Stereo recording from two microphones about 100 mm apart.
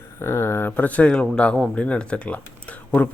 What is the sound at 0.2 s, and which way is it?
A man's voice, 25° left (ahead or behind).